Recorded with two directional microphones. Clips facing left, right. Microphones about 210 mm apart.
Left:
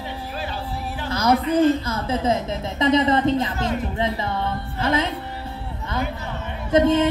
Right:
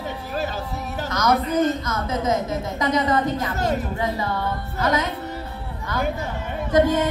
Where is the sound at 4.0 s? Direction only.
25° left (ahead or behind).